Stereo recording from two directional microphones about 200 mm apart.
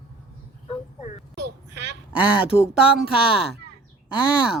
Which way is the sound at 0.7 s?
35° left (ahead or behind).